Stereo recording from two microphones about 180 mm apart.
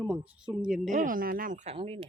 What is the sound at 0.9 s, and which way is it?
Speech, 45° right (ahead or behind).